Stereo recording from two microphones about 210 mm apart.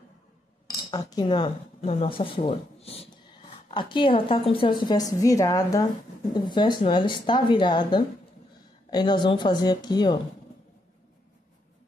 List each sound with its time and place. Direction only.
0.8 s speech: 20° left (ahead or behind)